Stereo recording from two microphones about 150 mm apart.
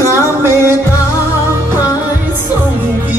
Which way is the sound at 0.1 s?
15° right (ahead or behind).